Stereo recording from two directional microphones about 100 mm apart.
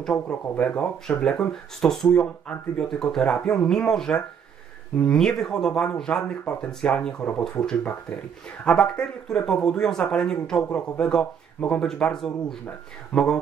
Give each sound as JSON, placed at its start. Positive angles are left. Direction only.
{"t": 0.0, "sound": "speech", "side_deg": 10}